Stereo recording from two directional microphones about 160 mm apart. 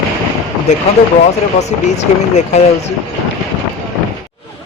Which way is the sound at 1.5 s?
45° left (ahead or behind).